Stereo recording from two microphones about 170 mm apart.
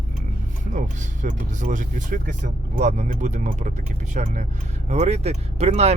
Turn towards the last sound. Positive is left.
turn(degrees=-40)  # may be behind; listen again after turning